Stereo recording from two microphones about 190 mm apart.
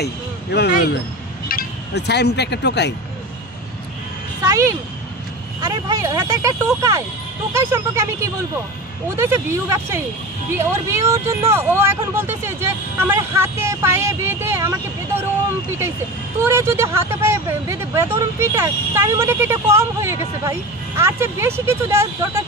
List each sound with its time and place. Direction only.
0.0 s speech: 60° left (ahead or behind)
4.5 s speech: 15° right (ahead or behind)
16.4 s speech: 15° right (ahead or behind)